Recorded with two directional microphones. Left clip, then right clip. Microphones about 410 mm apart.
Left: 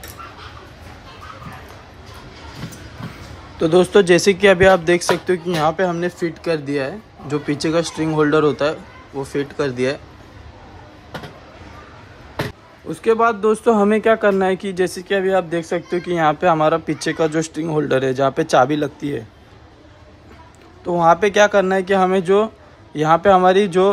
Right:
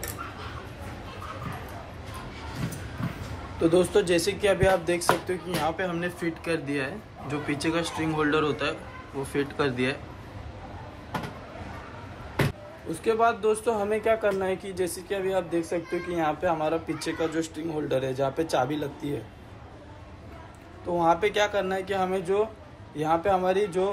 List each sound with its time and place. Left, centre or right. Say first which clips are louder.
3.7 s speech: left 11 dB; centre
13.0 s speech: left 8 dB; centre
21.0 s speech: left 10 dB; centre